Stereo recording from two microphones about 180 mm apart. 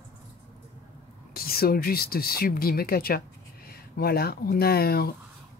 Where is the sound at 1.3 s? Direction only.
55° left (ahead or behind).